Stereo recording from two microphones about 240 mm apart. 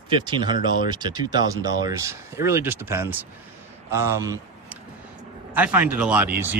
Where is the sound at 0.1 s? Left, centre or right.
Centre.